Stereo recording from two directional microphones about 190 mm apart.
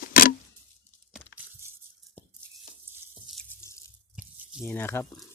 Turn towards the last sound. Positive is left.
turn(degrees=10)  # may be behind; listen again after turning